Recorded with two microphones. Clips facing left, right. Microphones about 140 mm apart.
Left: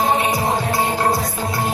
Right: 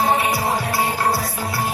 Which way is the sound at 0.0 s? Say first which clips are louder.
Left 1 dB; 20° left (ahead or behind).